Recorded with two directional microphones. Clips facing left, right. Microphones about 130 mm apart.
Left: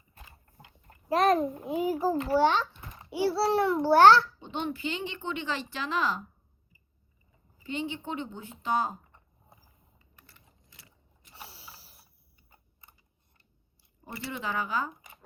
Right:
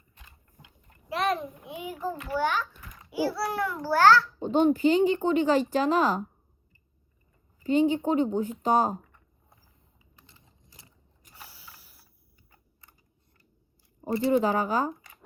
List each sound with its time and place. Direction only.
0.4 s a child's voice: 50° left (ahead or behind); by 4.3 s 25° left (ahead or behind)
4.4 s speech: 45° right (ahead or behind)
7.6 s speech: 40° right (ahead or behind)
10.3 s gears: 20° right (ahead or behind)
11.3 s mechanisms: 30° left (ahead or behind)
14.3 s speech: 45° right (ahead or behind)